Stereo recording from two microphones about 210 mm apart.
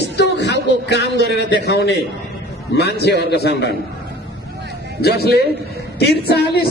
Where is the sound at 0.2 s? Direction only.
55° left (ahead or behind).